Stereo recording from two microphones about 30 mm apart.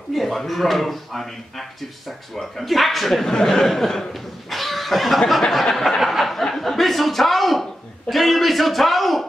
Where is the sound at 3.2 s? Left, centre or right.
Left.